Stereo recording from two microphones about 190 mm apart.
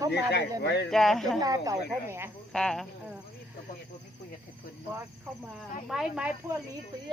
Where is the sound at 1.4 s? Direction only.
20° right (ahead or behind).